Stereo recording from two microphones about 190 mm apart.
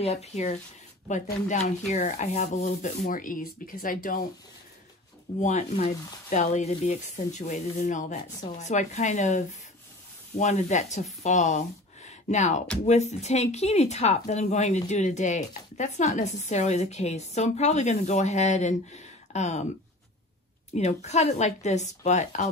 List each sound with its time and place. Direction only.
0.0 s speech: 35° left (ahead or behind)
1.9 s speech: 40° left (ahead or behind)
5.4 s speech: 40° left (ahead or behind)
20.7 s speech: 35° left (ahead or behind)